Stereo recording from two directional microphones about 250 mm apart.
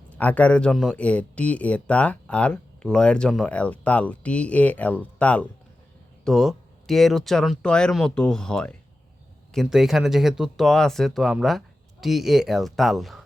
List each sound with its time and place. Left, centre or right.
0.2 s speech: centre